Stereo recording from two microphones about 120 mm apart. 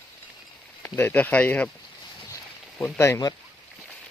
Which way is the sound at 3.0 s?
25° left (ahead or behind).